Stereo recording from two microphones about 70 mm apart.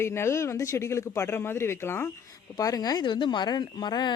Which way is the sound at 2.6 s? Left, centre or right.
Left.